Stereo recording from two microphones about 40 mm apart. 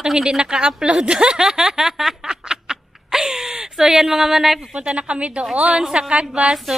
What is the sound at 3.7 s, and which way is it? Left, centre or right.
Speech, centre.